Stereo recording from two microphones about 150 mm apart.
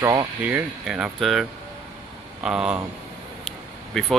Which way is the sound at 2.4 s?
5° right (ahead or behind).